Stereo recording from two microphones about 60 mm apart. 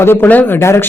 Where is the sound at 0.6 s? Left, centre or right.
Left.